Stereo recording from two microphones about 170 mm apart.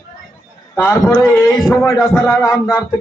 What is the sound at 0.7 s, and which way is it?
A man's voice, 15° left (ahead or behind).